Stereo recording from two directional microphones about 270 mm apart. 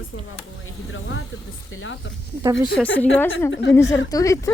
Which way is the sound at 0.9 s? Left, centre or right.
Left.